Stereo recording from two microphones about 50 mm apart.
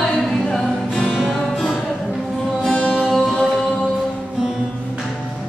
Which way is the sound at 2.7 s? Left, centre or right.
Left.